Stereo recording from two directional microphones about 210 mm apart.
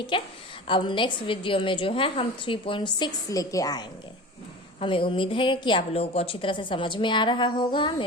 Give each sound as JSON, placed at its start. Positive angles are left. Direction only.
{"t": 0.1, "sound": "a woman's voice", "side_deg": 25}